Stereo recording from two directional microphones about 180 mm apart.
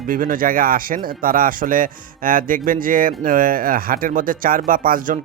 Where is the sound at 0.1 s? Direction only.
50° right (ahead or behind).